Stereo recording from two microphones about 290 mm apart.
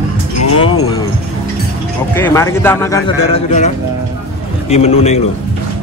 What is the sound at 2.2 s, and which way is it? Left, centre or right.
Speech, centre.